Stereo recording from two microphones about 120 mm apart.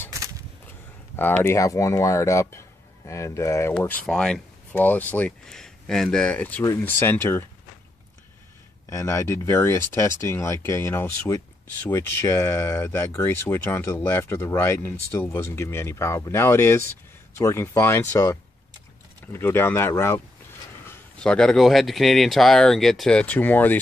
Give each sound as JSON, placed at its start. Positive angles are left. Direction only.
{"t": 1.1, "sound": "speech", "side_deg": 20}
{"t": 3.7, "sound": "speech", "side_deg": 10}
{"t": 8.9, "sound": "speech", "side_deg": 25}
{"t": 21.2, "sound": "speech", "side_deg": 5}